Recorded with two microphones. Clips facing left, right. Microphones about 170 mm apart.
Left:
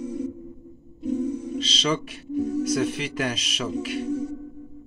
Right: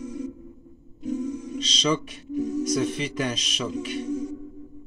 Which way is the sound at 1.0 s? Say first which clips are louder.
Left 3 dB; 60° left (ahead or behind).